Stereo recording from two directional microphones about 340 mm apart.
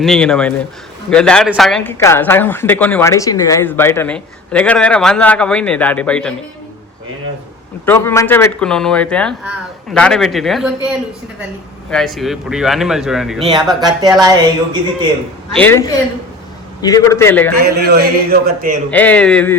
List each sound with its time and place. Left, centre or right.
0.0 s speech: centre
7.9 s speech: centre
11.9 s speech: centre
15.5 s a man's voice: centre
17.6 s a man's voice: right
18.9 s speech: centre